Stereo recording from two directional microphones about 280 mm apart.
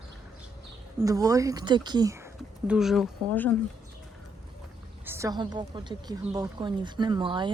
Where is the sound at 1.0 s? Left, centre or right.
Centre.